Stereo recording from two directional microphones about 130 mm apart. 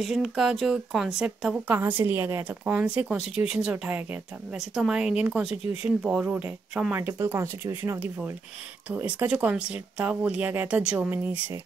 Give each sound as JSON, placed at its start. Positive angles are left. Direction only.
{"t": 0.0, "sound": "speech", "side_deg": 0}
{"t": 6.9, "sound": "speech", "side_deg": -20}